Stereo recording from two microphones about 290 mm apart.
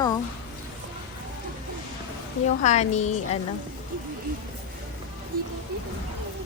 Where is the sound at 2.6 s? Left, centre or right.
Left.